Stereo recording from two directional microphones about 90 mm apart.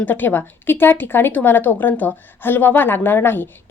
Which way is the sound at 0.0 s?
20° left (ahead or behind).